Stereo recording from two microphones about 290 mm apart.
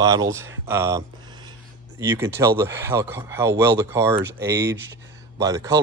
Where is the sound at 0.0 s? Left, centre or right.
Centre.